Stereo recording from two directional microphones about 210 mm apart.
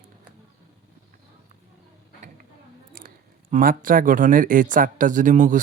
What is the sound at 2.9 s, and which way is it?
A man's voice, 40° right (ahead or behind).